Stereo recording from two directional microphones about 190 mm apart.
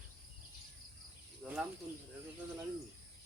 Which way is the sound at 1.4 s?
5° left (ahead or behind).